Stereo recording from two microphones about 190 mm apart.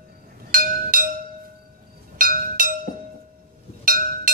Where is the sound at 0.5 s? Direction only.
45° right (ahead or behind).